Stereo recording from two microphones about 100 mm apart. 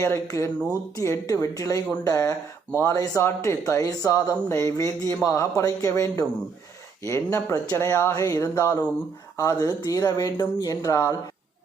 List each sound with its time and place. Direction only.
0.0 s speech: 30° left (ahead or behind)